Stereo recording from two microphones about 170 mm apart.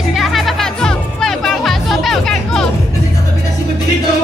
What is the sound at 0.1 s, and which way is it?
Music, centre (ahead or behind).